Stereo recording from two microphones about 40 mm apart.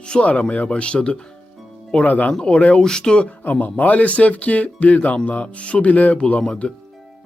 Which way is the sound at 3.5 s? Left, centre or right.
Left.